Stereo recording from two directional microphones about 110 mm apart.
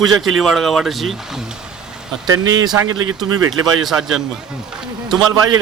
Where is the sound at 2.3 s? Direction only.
35° right (ahead or behind).